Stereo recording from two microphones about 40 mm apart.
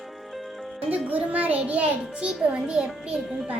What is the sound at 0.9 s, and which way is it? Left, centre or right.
A child's voice, right.